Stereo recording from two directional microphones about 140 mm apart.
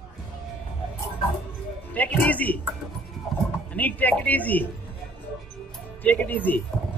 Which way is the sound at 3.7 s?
10° left (ahead or behind).